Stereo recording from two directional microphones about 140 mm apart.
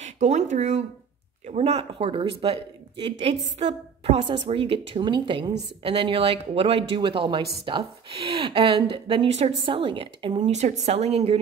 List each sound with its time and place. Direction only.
0.0 s speech: 55° right (ahead or behind); by 9.3 s 35° right (ahead or behind)
9.3 s speech: 45° right (ahead or behind)
10.5 s a woman's voice: 55° right (ahead or behind)